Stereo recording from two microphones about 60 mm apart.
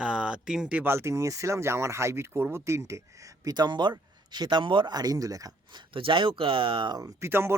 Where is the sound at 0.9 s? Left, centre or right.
Right.